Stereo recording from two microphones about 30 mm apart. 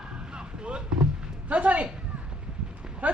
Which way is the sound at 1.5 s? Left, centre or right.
Right.